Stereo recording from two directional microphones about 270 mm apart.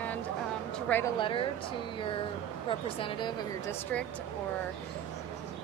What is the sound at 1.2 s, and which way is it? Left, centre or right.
A woman's voice, centre.